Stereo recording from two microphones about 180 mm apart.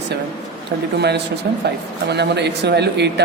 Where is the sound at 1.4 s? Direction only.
65° right (ahead or behind).